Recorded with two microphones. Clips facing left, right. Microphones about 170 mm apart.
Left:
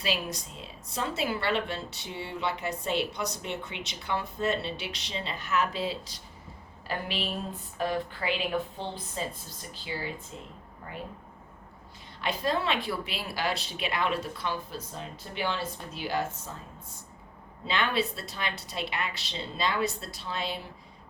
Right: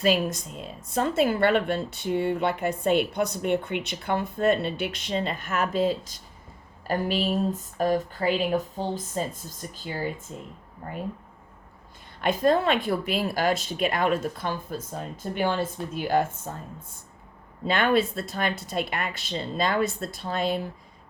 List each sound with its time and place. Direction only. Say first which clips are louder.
0.0 s speech: right 9 dB; 50° right (ahead or behind)
12.2 s speech: right 7 dB; 50° right (ahead or behind)
17.7 s speech: right 6 dB; 50° right (ahead or behind)